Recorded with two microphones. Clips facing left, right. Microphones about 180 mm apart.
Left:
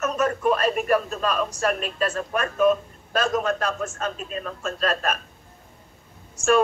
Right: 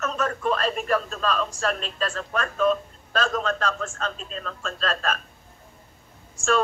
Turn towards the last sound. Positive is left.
turn(degrees=15)  # may be behind; listen again after turning